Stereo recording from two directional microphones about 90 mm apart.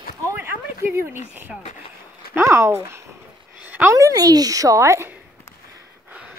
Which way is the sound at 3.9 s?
40° right (ahead or behind).